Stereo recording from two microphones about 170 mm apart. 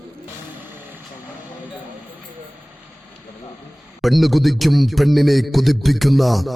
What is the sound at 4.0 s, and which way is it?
Speech, centre (ahead or behind).